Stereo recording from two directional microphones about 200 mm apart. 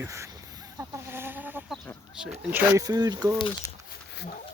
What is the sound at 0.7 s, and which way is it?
Chicken, 10° right (ahead or behind).